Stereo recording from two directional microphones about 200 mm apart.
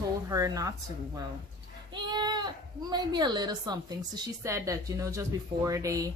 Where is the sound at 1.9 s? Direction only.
20° right (ahead or behind).